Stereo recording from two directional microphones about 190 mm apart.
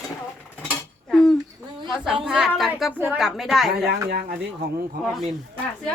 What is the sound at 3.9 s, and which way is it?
Speech, 60° right (ahead or behind).